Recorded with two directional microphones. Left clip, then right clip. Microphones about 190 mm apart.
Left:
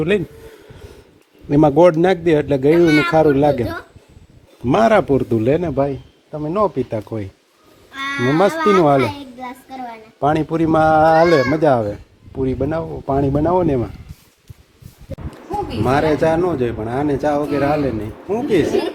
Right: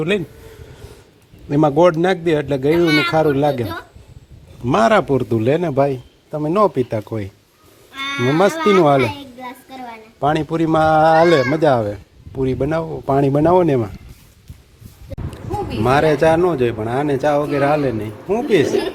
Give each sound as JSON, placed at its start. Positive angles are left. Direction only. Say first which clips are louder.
{"t": 1.5, "sound": "a man's voice", "louder": "left 2 dB", "side_deg": 15}
{"t": 5.7, "sound": "speech", "louder": "right 2 dB", "side_deg": -15}
{"t": 6.9, "sound": "speech", "louder": "right 1 dB", "side_deg": 0}
{"t": 8.1, "sound": "speech", "louder": "even", "side_deg": 15}
{"t": 8.6, "sound": "a child's voice", "louder": "right 1 dB", "side_deg": 0}
{"t": 13.7, "sound": "speech", "louder": "right 1 dB", "side_deg": 0}
{"t": 15.8, "sound": "speech", "louder": "right 2 dB", "side_deg": 0}